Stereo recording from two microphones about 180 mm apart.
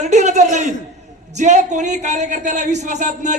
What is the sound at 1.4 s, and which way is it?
Speech, 40° right (ahead or behind).